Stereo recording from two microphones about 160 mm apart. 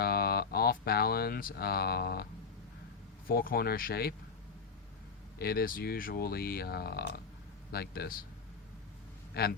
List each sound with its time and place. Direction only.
0.0 s a sound: 75° left (ahead or behind)
3.2 s speech: 65° left (ahead or behind)
5.4 s speech: 75° left (ahead or behind)
9.3 s speech: 80° left